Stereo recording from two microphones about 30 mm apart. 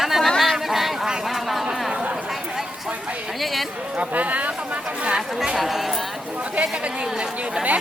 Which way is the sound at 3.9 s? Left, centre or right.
Right.